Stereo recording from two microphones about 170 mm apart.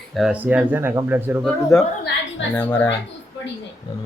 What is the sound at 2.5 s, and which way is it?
Speech, 10° left (ahead or behind).